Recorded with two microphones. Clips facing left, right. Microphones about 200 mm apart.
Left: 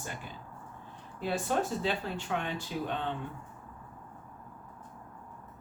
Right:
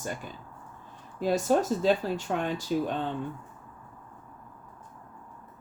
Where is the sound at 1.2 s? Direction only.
40° right (ahead or behind).